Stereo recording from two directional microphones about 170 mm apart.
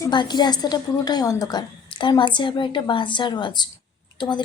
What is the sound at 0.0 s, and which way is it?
A woman's voice, 25° left (ahead or behind).